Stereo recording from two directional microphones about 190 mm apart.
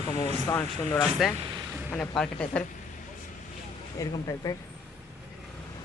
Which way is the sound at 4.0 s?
20° left (ahead or behind).